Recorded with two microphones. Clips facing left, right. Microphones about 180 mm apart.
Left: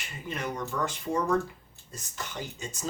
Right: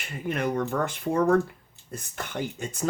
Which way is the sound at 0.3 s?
55° right (ahead or behind).